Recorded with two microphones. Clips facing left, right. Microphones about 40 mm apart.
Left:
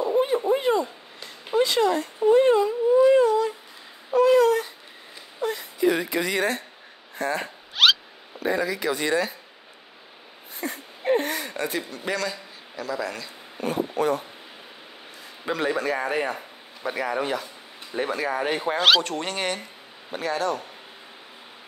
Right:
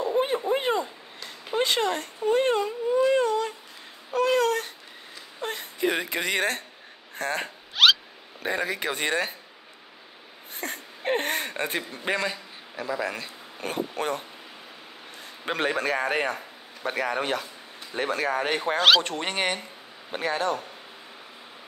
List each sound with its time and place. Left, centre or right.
0.5 s a sound: right
1.6 s speech: right
2.3 s a sound: right
4.2 s baby cry: right
5.4 s speech: right
7.7 s rodents: centre
8.4 s a man's voice: right
10.5 s a sound: right
13.2 s speech: right
15.4 s a man's voice: right
18.8 s speech: centre
19.0 s a man's voice: right